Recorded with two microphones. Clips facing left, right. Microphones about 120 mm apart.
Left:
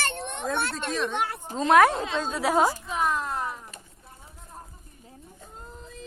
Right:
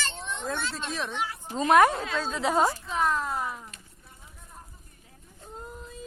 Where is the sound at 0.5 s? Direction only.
60° left (ahead or behind).